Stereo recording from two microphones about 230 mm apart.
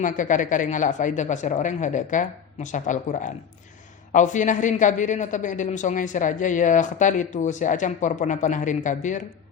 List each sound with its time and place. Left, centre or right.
0.0 s a man's voice: left